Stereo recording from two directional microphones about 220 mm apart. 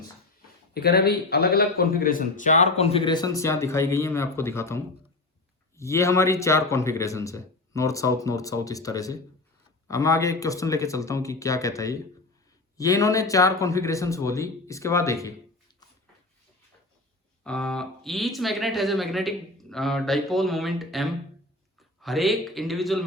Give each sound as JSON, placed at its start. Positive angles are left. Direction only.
{"t": 0.7, "sound": "a man's voice", "side_deg": 45}
{"t": 17.4, "sound": "speech", "side_deg": 5}